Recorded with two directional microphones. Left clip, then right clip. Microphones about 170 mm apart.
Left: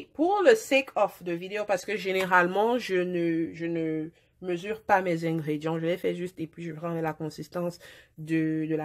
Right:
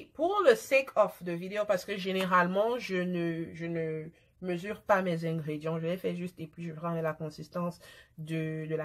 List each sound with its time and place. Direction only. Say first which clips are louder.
0.3 s speech: left 3 dB; 30° left (ahead or behind)